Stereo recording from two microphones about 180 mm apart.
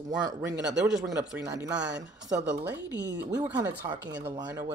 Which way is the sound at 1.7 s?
75° right (ahead or behind).